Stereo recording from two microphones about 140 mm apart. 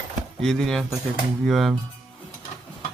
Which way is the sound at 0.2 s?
5° left (ahead or behind).